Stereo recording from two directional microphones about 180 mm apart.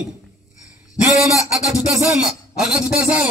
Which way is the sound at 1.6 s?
5° right (ahead or behind).